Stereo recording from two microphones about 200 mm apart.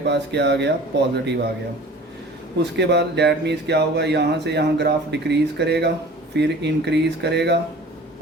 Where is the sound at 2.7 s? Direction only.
55° right (ahead or behind).